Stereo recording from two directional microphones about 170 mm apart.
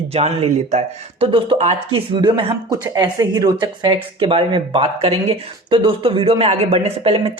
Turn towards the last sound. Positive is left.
turn(degrees=-35)  # may be behind; listen again after turning